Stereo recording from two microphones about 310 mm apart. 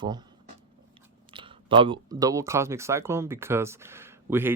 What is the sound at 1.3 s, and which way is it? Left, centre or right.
Speech, centre.